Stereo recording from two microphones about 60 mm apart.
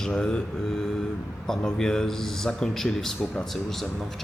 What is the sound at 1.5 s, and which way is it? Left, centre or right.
Speech, centre.